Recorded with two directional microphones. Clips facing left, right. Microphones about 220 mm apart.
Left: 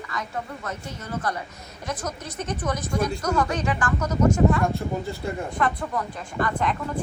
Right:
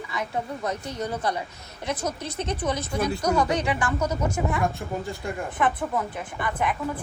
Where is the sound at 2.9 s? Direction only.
10° right (ahead or behind).